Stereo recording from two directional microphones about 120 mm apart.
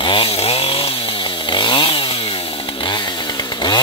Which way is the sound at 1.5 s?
40° left (ahead or behind).